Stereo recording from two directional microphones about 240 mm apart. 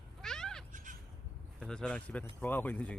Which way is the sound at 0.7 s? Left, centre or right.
Right.